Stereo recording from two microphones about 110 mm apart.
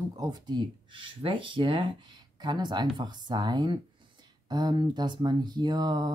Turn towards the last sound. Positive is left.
turn(degrees=-40)  # may be behind; listen again after turning